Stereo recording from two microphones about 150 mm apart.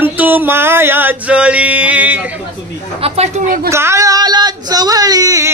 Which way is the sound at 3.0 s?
45° right (ahead or behind).